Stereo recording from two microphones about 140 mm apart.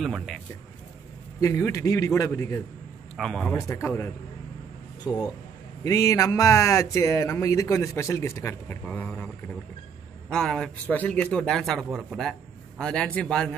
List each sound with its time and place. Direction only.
0.0 s a man's voice: centre (ahead or behind)
1.4 s speech: 20° left (ahead or behind)
3.2 s a man's voice: centre (ahead or behind)
3.5 s speech: 20° left (ahead or behind)
10.3 s a man's voice: 5° left (ahead or behind)